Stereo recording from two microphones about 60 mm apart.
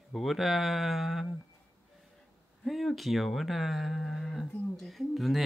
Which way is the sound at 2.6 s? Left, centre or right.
Centre.